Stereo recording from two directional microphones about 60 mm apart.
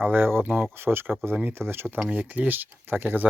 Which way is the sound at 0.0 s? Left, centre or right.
Right.